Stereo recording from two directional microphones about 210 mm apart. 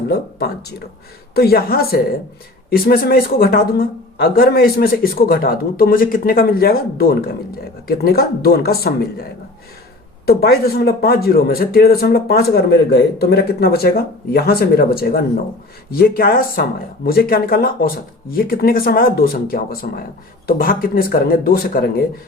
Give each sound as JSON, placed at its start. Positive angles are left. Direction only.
{"t": 0.1, "sound": "a man's voice", "side_deg": 50}
{"t": 10.2, "sound": "a man's voice", "side_deg": 45}